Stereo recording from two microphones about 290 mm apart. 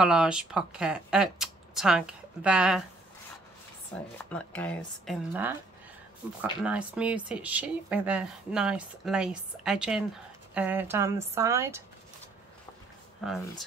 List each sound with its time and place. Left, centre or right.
0.0 s speech: centre
3.9 s speech: centre
6.6 s speech: centre
13.2 s speech: centre